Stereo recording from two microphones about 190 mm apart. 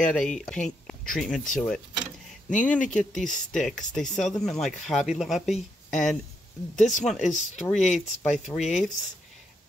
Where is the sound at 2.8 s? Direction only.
40° left (ahead or behind).